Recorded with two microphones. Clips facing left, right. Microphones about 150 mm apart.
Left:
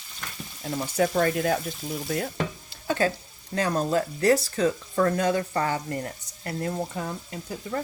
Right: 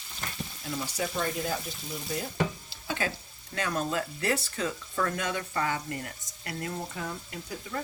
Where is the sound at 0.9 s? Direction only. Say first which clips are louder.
Left 10 dB; 65° left (ahead or behind).